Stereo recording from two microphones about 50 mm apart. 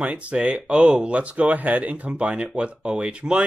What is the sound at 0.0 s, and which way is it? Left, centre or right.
Speech, right.